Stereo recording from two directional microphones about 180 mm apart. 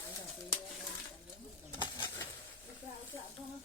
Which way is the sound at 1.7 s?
25° left (ahead or behind).